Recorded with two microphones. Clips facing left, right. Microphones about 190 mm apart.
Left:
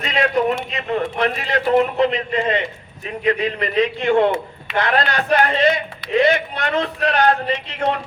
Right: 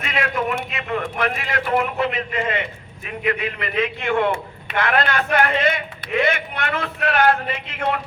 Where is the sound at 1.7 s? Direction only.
35° left (ahead or behind).